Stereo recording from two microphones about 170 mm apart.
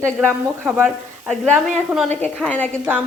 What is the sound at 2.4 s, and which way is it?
Speech, 10° left (ahead or behind).